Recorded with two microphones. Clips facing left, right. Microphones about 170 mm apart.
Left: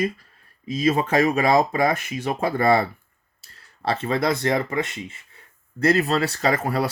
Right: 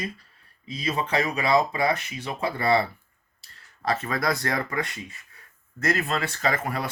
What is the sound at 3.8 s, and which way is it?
Speech, 30° left (ahead or behind).